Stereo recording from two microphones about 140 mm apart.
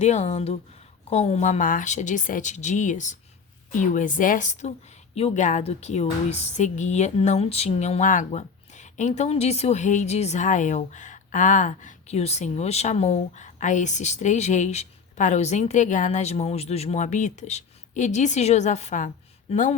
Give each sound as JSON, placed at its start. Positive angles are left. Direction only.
{"t": 0.0, "sound": "speech", "side_deg": 55}
{"t": 5.1, "sound": "speech", "side_deg": 55}